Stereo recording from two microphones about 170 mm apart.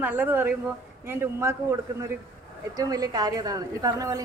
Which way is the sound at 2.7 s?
20° right (ahead or behind).